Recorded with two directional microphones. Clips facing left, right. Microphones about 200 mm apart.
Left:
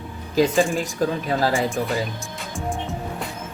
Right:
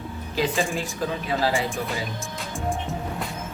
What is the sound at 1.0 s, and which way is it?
Speech, 45° left (ahead or behind).